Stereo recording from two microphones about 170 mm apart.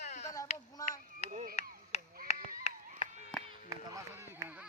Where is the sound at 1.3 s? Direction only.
45° right (ahead or behind).